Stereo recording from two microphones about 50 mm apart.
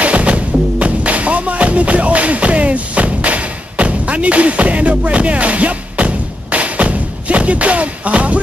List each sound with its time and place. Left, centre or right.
0.0 s music: right